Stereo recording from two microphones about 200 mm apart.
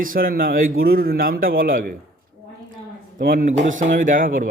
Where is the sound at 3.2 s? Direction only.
45° right (ahead or behind).